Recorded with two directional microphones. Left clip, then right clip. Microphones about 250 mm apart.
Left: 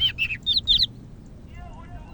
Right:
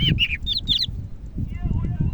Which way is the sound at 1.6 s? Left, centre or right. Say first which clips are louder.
Right 8 dB; right.